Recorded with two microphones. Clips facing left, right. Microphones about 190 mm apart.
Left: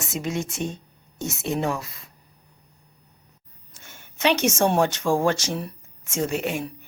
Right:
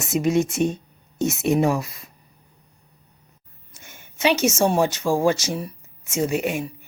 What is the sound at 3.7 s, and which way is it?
A woman's voice, 10° right (ahead or behind).